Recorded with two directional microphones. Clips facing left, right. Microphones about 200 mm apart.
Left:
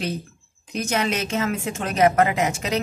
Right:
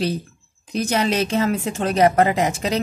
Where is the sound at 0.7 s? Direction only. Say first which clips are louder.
Right 4 dB; 35° right (ahead or behind).